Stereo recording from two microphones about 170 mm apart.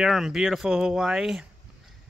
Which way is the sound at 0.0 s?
Centre (ahead or behind).